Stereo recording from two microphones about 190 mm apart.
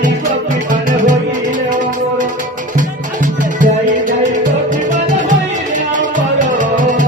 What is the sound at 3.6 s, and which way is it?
Music, 45° right (ahead or behind).